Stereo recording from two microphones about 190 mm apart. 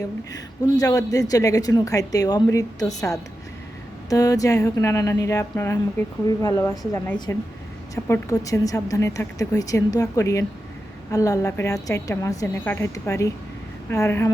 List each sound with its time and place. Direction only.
0.3 s a woman's voice: 20° left (ahead or behind)